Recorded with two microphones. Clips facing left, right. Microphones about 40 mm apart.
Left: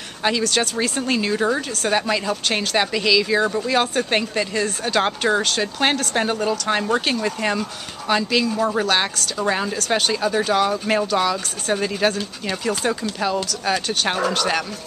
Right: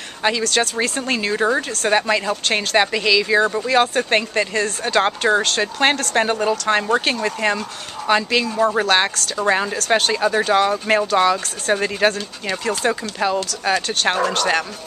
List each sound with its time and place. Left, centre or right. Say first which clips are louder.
0.2 s speech: right 1 dB; centre